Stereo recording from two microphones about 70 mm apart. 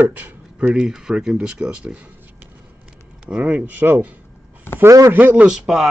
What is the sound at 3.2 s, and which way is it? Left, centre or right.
Speech, centre.